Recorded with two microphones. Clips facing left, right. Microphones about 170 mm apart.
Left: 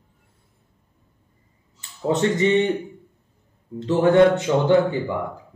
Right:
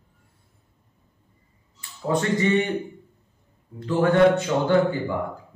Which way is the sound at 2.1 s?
20° left (ahead or behind).